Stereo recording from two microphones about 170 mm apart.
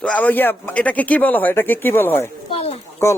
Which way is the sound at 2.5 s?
35° left (ahead or behind).